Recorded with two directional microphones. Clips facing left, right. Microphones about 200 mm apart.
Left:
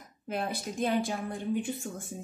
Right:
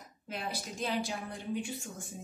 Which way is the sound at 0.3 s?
50° left (ahead or behind).